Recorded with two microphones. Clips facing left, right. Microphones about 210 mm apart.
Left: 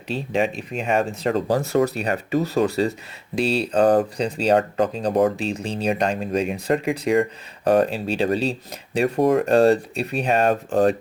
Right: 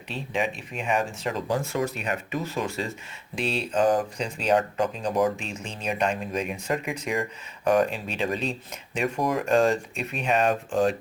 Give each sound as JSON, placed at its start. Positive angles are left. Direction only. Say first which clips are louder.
{"t": 0.1, "sound": "speech", "louder": "left 6 dB", "side_deg": 35}